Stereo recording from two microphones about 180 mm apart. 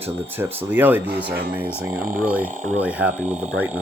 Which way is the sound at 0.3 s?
10° right (ahead or behind).